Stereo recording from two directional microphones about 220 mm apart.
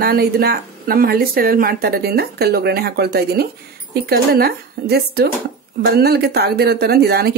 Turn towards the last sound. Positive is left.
turn(degrees=-45)  # may be behind; listen again after turning